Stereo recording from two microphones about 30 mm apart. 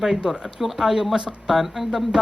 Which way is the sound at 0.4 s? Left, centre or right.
Centre.